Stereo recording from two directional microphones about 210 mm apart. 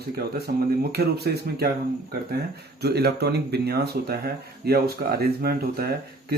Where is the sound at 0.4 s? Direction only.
50° right (ahead or behind).